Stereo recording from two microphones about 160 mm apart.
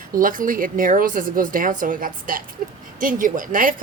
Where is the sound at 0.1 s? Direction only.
60° right (ahead or behind).